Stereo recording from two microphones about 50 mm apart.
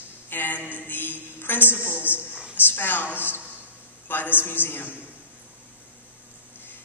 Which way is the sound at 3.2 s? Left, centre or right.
Left.